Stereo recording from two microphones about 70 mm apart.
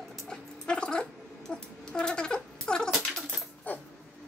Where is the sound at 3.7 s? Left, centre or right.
Left.